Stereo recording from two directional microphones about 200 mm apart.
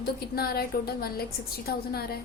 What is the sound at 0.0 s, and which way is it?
A woman's voice, 50° left (ahead or behind).